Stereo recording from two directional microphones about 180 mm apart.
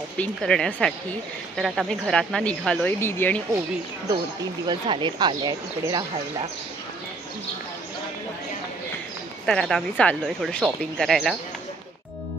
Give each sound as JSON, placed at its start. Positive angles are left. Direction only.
{"t": 0.2, "sound": "speech", "side_deg": 5}
{"t": 4.6, "sound": "speech", "side_deg": -25}
{"t": 9.5, "sound": "speech", "side_deg": 0}